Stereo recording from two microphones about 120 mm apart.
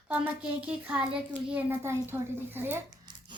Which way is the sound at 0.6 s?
10° right (ahead or behind).